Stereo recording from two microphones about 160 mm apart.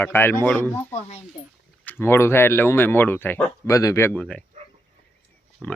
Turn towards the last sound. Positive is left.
turn(degrees=5)  # may be behind; listen again after turning